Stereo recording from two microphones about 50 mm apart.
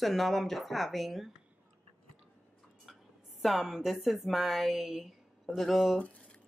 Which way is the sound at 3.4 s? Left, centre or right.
Centre.